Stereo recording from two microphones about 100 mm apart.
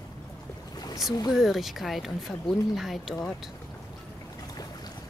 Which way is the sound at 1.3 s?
5° right (ahead or behind).